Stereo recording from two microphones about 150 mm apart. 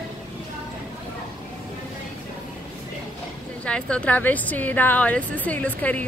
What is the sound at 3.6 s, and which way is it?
A woman's voice, 5° left (ahead or behind).